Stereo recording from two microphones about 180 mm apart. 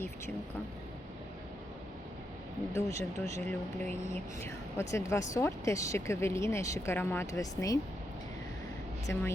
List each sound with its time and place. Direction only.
2.7 s speech: 15° left (ahead or behind)
9.1 s speech: 15° left (ahead or behind)